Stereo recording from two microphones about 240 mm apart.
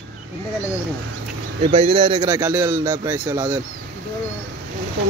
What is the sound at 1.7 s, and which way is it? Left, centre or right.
A man's voice, right.